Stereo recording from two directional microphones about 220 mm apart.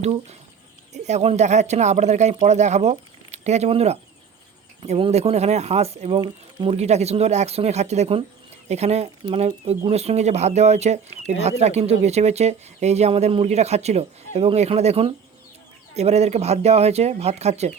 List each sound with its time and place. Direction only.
0.0 s speech: 30° right (ahead or behind)